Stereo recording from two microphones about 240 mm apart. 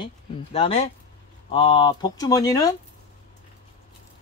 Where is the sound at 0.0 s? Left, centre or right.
Left.